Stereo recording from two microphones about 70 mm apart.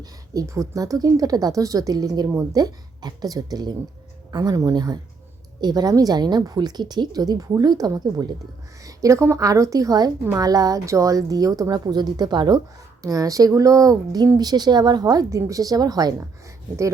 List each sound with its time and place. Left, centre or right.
0.3 s a woman's voice: right
5.9 s speech: right
9.0 s a woman's voice: right
13.0 s a woman's voice: right
14.3 s speech: right
15.3 s a woman's voice: right